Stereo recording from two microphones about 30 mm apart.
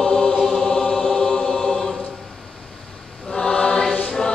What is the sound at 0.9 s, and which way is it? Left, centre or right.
Chant, centre.